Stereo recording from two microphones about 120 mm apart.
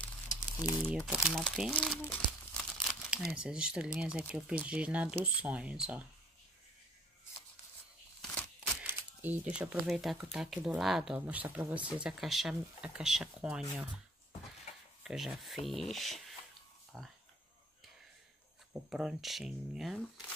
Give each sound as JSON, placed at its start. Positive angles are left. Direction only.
{"t": 0.6, "sound": "speech", "side_deg": 30}
{"t": 1.0, "sound": "speech", "side_deg": -5}
{"t": 2.0, "sound": "crumpling", "side_deg": 15}
{"t": 2.8, "sound": "speech", "side_deg": 0}
{"t": 8.8, "sound": "a sound", "side_deg": -15}
{"t": 9.6, "sound": "speech", "side_deg": -5}
{"t": 15.0, "sound": "speech", "side_deg": 0}
{"t": 18.7, "sound": "speech", "side_deg": -5}